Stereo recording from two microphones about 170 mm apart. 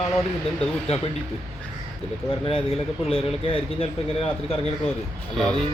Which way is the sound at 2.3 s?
30° left (ahead or behind).